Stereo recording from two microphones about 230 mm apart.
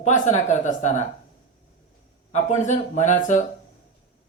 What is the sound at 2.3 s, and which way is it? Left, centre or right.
Speech, left.